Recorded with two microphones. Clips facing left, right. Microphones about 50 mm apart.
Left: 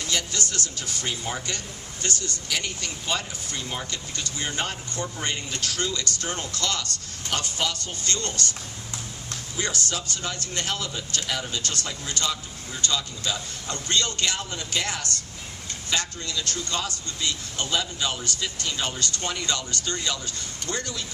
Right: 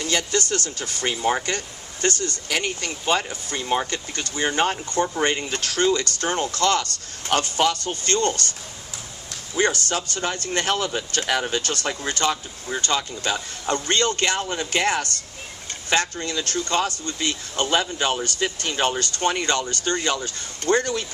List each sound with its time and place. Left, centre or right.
0.0 s speech: right
9.6 s speech: right